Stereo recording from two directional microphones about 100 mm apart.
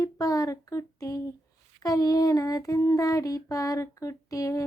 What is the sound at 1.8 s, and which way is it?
Speech, 35° left (ahead or behind).